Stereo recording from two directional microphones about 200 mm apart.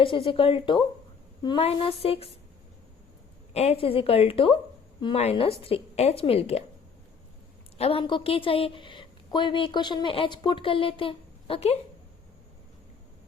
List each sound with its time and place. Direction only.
0.3 s a woman's voice: 25° left (ahead or behind)
3.5 s a woman's voice: 30° left (ahead or behind)
7.8 s a woman's voice: 25° left (ahead or behind)